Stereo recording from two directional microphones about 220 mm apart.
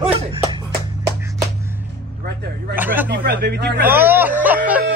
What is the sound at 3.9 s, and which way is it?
Speech, 10° right (ahead or behind).